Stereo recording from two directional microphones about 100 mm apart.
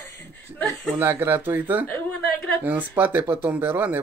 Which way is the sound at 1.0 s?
25° right (ahead or behind).